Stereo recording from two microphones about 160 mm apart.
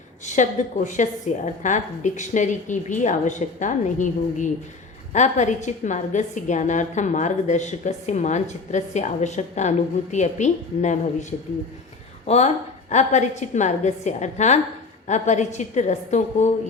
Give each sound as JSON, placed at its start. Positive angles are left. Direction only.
{"t": 0.3, "sound": "a woman's voice", "side_deg": 50}